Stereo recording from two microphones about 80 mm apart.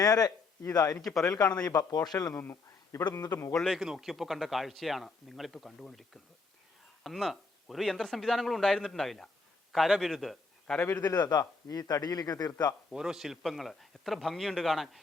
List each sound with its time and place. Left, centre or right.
0.0 s a man's voice: left
2.3 s a man's voice: left
3.0 s a man's voice: left
3.7 s a man's voice: centre
11.0 s a man's voice: left
12.9 s speech: centre